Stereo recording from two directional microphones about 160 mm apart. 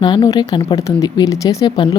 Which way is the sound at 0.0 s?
30° left (ahead or behind).